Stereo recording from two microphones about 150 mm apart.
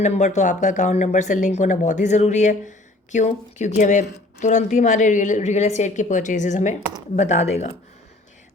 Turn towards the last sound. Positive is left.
turn(degrees=45)  # may be behind; listen again after turning